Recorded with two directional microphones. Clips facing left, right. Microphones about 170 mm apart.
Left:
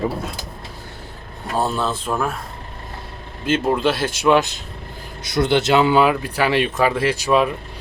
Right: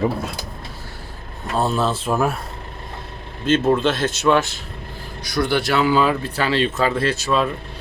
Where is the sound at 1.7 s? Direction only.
5° right (ahead or behind).